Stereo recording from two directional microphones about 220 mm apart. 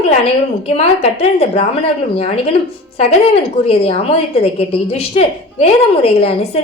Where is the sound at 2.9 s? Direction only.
25° left (ahead or behind).